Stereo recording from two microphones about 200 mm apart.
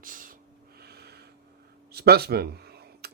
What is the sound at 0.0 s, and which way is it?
Snort, 45° right (ahead or behind).